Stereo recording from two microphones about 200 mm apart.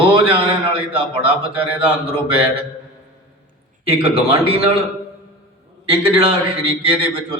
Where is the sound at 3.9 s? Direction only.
30° right (ahead or behind).